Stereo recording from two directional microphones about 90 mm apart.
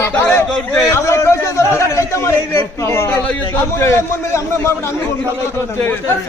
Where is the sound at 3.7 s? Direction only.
30° left (ahead or behind).